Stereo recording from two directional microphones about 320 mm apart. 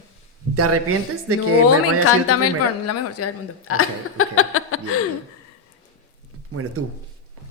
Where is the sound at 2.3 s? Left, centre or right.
Left.